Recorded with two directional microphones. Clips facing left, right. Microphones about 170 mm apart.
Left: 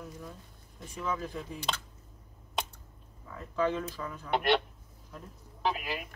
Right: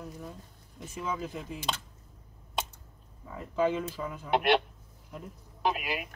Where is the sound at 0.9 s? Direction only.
20° right (ahead or behind).